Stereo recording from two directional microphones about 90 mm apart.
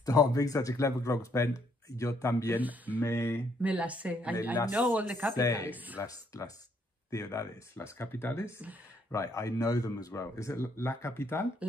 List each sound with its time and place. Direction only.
0.0 s speech: 45° left (ahead or behind)
2.6 s speech: 20° right (ahead or behind)
3.0 s speech: 30° left (ahead or behind)
3.6 s a woman's voice: 15° right (ahead or behind)
5.3 s speech: 40° left (ahead or behind)
5.7 s speech: 20° right (ahead or behind)
6.0 s speech: 40° left (ahead or behind)